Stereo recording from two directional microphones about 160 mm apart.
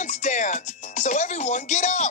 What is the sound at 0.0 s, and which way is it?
Music, 50° left (ahead or behind).